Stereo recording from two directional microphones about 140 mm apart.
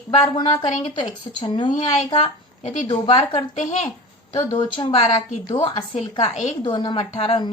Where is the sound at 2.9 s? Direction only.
30° left (ahead or behind).